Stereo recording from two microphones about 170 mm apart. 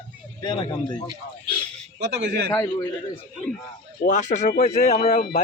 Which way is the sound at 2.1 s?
75° right (ahead or behind).